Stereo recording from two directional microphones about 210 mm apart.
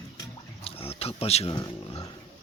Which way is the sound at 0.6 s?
30° left (ahead or behind).